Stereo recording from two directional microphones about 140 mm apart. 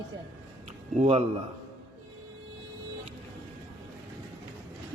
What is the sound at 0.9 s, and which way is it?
Speech, 50° right (ahead or behind).